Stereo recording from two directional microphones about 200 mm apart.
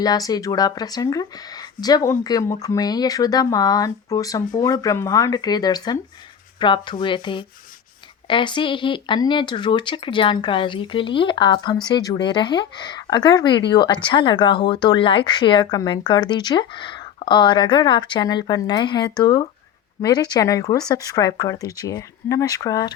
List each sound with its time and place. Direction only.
0.0 s speech: 20° left (ahead or behind)